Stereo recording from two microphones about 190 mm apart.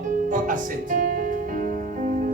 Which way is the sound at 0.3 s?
45° right (ahead or behind).